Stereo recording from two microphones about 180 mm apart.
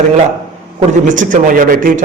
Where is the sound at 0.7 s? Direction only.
45° right (ahead or behind).